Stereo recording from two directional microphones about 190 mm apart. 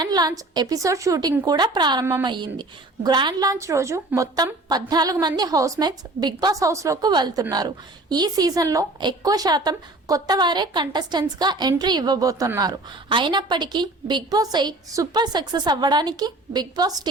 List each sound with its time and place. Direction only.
0.0 s a woman's voice: 20° right (ahead or behind)